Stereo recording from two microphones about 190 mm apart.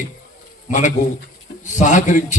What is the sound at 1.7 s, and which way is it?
Speech, 40° left (ahead or behind).